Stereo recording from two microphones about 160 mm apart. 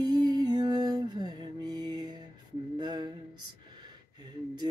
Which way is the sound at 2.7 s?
30° right (ahead or behind).